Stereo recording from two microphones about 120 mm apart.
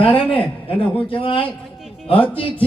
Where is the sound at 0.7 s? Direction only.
50° left (ahead or behind).